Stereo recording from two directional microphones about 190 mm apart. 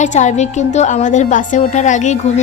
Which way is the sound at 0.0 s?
40° left (ahead or behind).